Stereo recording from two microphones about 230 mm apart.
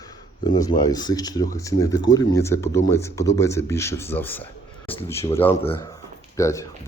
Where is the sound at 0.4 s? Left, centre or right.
Centre.